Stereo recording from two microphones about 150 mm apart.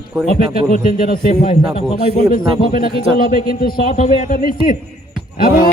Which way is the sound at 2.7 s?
80° left.